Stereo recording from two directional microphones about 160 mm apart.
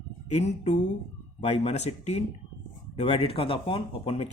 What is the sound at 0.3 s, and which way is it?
Speech, 40° left (ahead or behind).